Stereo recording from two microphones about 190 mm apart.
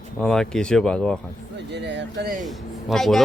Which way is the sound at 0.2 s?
Centre (ahead or behind).